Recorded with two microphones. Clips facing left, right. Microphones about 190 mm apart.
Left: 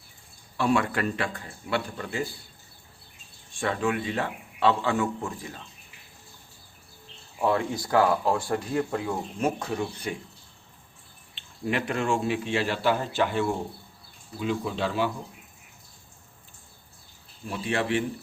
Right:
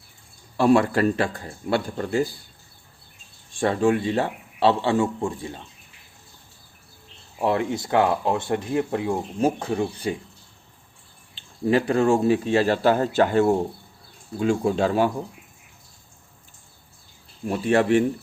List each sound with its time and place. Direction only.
0.5 s a man's voice: 35° right (ahead or behind)
3.6 s a man's voice: 35° right (ahead or behind)
7.3 s speech: 25° right (ahead or behind)
11.6 s a man's voice: 35° right (ahead or behind)
17.5 s speech: 45° right (ahead or behind)